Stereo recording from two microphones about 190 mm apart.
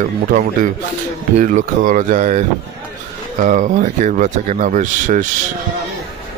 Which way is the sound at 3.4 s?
45° right (ahead or behind).